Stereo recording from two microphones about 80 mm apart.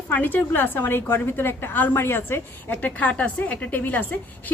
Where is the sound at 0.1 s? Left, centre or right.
Left.